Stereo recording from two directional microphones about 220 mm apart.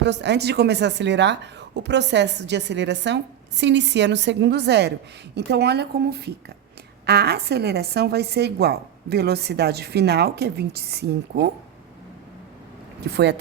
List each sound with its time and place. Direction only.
0.0 s speech: 50° right (ahead or behind)
13.0 s speech: 50° right (ahead or behind)